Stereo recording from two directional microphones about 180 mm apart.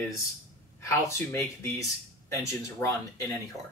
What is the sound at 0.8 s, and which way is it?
Speech, 15° left (ahead or behind).